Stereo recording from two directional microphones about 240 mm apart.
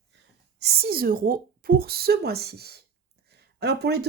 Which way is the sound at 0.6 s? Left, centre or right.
Right.